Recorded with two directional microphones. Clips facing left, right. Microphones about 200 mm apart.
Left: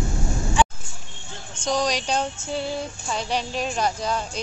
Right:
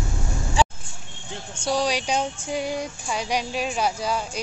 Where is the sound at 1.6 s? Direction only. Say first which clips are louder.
Even; 10° right (ahead or behind).